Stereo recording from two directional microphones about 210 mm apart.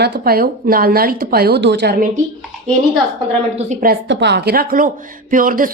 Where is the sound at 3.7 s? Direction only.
45° right (ahead or behind).